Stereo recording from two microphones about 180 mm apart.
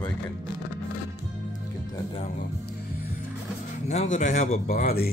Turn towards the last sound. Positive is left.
turn(degrees=55)  # may be behind; listen again after turning